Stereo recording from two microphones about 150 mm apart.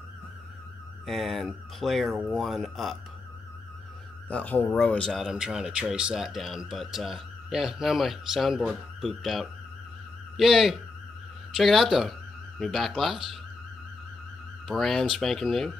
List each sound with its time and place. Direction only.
1.0 s speech: centre (ahead or behind)
4.3 s speech: 10° left (ahead or behind)
14.7 s speech: centre (ahead or behind)